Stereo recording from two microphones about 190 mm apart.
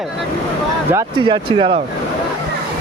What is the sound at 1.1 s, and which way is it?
Speech, 25° right (ahead or behind).